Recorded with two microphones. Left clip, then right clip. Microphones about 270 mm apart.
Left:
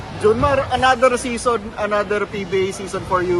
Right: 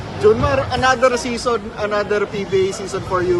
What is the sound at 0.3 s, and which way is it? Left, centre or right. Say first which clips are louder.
Speech: right 1 dB; left.